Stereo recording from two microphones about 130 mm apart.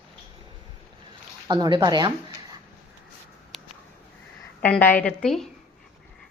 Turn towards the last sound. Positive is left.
turn(degrees=5)  # may be behind; listen again after turning